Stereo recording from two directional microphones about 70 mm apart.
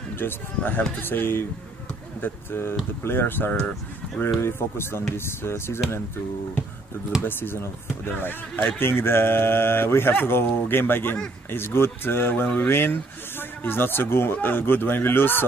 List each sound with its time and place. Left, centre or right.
0.6 s speech: left
7.2 s speech: left